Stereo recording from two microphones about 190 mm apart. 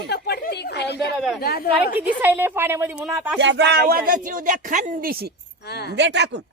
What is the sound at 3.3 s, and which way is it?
Speech, 65° right (ahead or behind).